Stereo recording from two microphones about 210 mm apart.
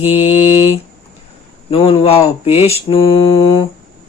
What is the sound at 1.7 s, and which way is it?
Mantra, 25° left (ahead or behind).